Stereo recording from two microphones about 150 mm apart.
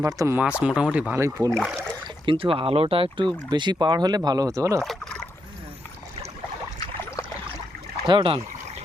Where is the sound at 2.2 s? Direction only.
35° right (ahead or behind).